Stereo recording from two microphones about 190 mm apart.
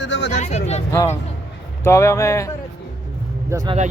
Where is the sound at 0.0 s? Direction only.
70° left (ahead or behind).